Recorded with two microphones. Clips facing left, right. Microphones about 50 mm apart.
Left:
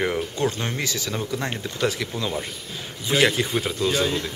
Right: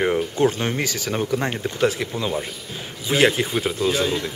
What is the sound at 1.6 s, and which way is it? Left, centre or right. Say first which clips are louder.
Speech: right 4 dB; right.